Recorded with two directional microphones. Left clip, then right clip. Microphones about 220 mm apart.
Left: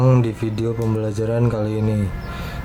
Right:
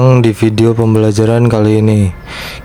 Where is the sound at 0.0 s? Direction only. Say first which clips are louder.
Right 10 dB; 40° right (ahead or behind).